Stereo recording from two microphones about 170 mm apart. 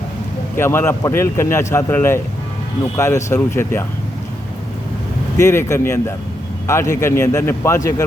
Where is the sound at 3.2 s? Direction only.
15° left (ahead or behind).